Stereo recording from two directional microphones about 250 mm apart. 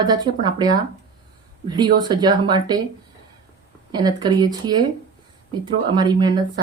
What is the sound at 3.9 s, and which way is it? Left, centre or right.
Speech, centre.